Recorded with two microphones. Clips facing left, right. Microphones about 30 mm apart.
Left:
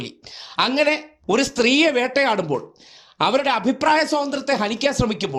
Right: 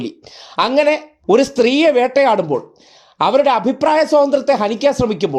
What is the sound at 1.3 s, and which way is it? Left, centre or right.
Speech, left.